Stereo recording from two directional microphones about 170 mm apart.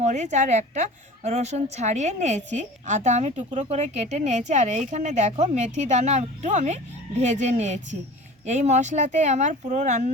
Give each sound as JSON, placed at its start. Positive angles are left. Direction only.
{"t": 0.0, "sound": "a woman's voice", "side_deg": -45}